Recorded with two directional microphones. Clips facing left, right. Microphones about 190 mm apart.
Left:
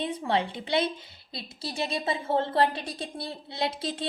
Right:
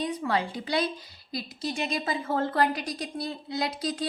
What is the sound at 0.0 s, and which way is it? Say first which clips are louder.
A woman's voice: even; 25° left (ahead or behind).